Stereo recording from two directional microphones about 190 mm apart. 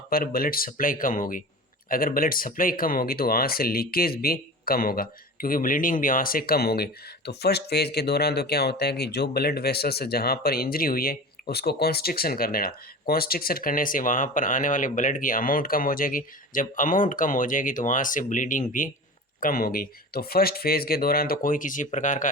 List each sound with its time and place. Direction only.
0.1 s speech: 50° left (ahead or behind)